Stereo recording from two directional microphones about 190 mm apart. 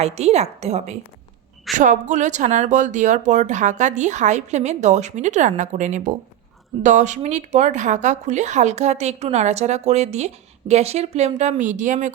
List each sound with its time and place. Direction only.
0.0 s speech: 35° right (ahead or behind)